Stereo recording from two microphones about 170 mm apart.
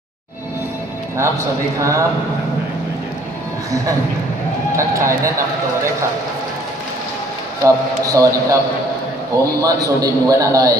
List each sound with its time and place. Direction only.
1.8 s speech: 20° right (ahead or behind)
4.7 s speech: 15° right (ahead or behind)
7.6 s a man's voice: 20° right (ahead or behind)